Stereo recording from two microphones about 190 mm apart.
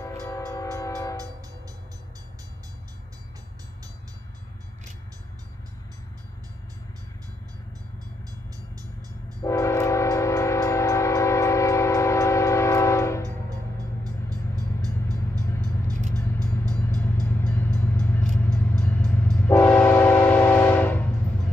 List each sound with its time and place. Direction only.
0.0 s train: 15° left (ahead or behind)
9.4 s train: 15° left (ahead or behind)
14.0 s vehicle: 20° right (ahead or behind)
16.7 s vehicle: 10° left (ahead or behind)
19.3 s train: 10° left (ahead or behind)